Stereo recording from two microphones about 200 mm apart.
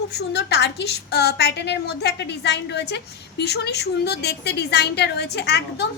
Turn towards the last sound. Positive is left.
turn(degrees=55)  # may be behind; listen again after turning